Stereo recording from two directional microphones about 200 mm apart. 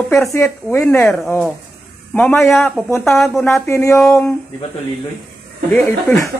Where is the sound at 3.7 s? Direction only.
15° left (ahead or behind).